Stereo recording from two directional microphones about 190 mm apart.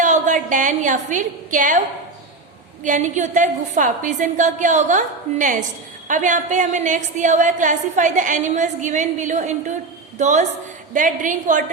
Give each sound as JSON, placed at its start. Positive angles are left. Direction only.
{"t": 0.0, "sound": "a woman's voice", "side_deg": -40}
{"t": 2.8, "sound": "a woman's voice", "side_deg": -40}